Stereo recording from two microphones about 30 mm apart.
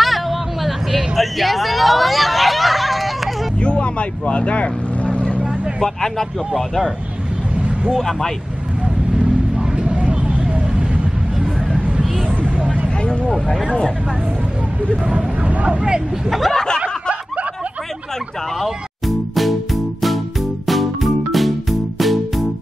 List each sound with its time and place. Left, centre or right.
0.0 s hubbub: centre
3.6 s vehicle: left
5.9 s speech: centre
7.9 s speech: centre
9.6 s vehicle: right
15.1 s speech: right
16.3 s speech: centre
16.8 s snicker: right
18.6 s music: centre